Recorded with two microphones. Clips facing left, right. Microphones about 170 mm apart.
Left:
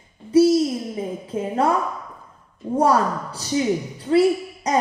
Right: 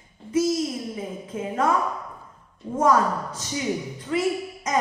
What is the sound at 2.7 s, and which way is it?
A woman's voice, 35° left (ahead or behind).